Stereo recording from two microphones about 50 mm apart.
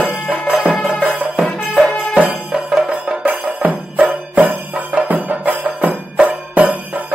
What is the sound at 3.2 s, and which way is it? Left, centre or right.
Music, right.